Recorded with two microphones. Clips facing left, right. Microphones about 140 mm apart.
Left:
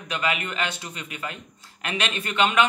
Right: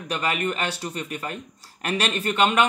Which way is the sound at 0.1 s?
40° right (ahead or behind).